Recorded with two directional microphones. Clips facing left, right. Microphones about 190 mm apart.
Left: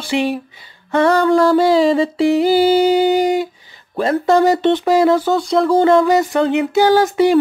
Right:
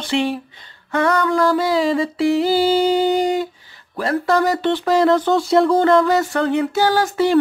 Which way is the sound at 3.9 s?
20° left (ahead or behind).